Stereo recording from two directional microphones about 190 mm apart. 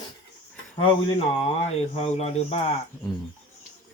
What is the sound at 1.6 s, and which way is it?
Speech, 35° left (ahead or behind).